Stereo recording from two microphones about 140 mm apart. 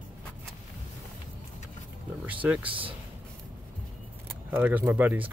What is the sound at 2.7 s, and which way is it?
Speech, 40° right (ahead or behind).